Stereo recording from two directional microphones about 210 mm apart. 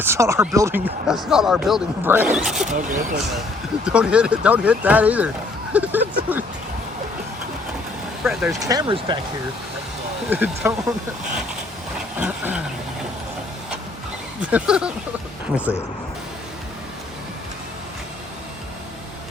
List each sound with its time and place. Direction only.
0.0 s speech: 10° right (ahead or behind)
1.0 s speech: centre (ahead or behind)
2.6 s speech: 35° right (ahead or behind)
3.8 s speech: 5° right (ahead or behind)
8.2 s speech: centre (ahead or behind)
8.5 s speech: 15° right (ahead or behind)
10.2 s speech: 10° right (ahead or behind)
12.2 s speech: 5° right (ahead or behind)
14.5 s speech: 5° right (ahead or behind)